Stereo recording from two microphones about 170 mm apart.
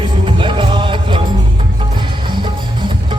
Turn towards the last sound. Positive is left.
turn(degrees=-25)  # may be behind; listen again after turning